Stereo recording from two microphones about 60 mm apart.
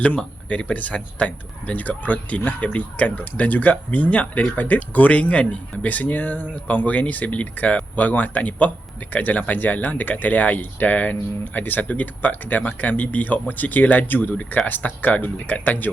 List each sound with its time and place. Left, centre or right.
0.4 s speech: left